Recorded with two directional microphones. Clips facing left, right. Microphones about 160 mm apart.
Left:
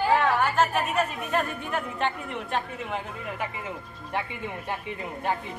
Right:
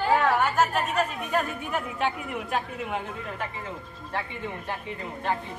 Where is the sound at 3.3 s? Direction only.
15° left (ahead or behind).